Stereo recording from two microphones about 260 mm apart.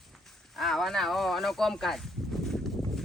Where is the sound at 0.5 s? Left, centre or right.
Centre.